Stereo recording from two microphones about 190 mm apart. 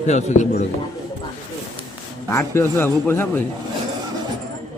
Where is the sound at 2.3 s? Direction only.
15° left (ahead or behind).